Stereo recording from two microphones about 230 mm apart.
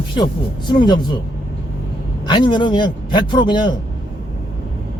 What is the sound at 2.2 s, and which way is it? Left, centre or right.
A man's voice, centre.